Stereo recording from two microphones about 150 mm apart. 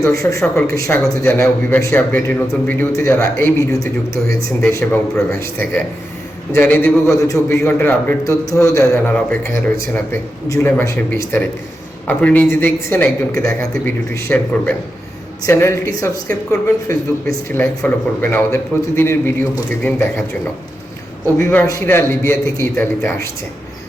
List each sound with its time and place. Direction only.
0.0 s a man's voice: 20° left (ahead or behind)
4.7 s a man's voice: 10° left (ahead or behind)
21.3 s a man's voice: 15° left (ahead or behind)